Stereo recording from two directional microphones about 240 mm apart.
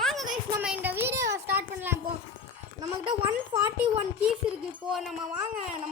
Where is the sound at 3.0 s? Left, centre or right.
Centre.